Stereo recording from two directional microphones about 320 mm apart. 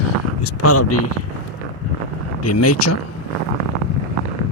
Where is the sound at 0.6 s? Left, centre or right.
Left.